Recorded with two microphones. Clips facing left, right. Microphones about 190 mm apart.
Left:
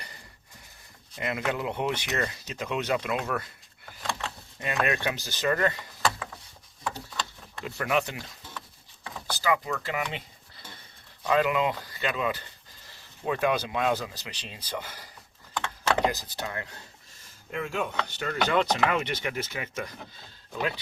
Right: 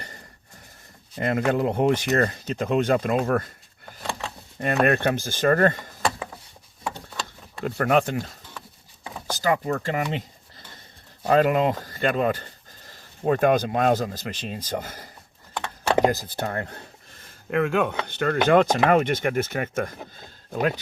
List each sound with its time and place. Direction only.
1.1 s speech: 45° right (ahead or behind)
4.6 s speech: 55° right (ahead or behind)
7.6 s speech: 50° right (ahead or behind)